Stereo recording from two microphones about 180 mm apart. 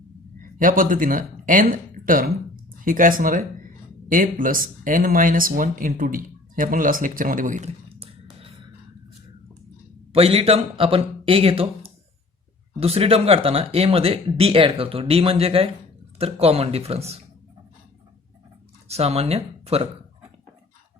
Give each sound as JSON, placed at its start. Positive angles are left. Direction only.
{"t": 0.6, "sound": "speech", "side_deg": -50}
{"t": 10.1, "sound": "speech", "side_deg": -35}
{"t": 18.9, "sound": "speech", "side_deg": -35}